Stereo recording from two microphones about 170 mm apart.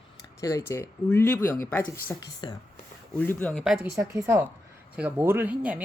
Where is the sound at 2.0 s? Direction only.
25° left (ahead or behind).